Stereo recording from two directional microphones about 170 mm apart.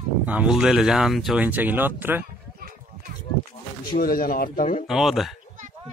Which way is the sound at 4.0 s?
55° left (ahead or behind).